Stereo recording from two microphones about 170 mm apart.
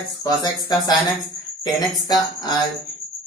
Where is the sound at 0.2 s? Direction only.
25° left (ahead or behind).